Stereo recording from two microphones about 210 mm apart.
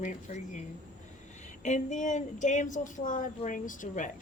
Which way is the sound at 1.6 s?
35° left (ahead or behind).